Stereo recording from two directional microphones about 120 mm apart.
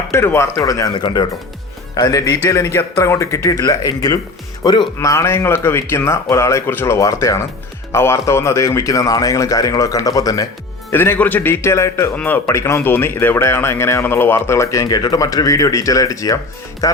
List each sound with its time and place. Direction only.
0.1 s speech: 20° left (ahead or behind); by 4.9 s 40° left (ahead or behind)
4.9 s speech: 25° left (ahead or behind)
10.9 s speech: 20° left (ahead or behind)